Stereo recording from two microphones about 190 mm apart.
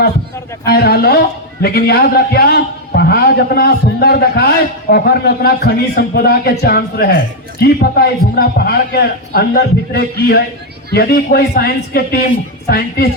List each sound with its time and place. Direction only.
0.6 s a man's voice: 55° left (ahead or behind)